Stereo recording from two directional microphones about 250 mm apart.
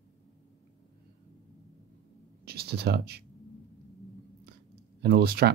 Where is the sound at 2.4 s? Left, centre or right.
Right.